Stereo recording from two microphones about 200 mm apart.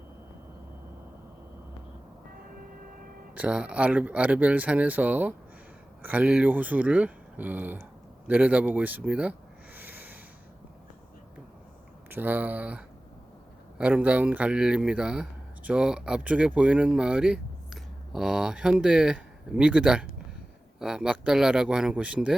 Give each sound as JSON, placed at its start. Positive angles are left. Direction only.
{"t": 3.3, "sound": "speech", "side_deg": -5}
{"t": 9.7, "sound": "snort", "side_deg": -10}
{"t": 12.1, "sound": "a man's voice", "side_deg": -10}